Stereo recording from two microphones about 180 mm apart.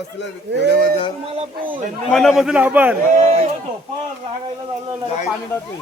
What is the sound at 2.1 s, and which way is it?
Speech, centre (ahead or behind).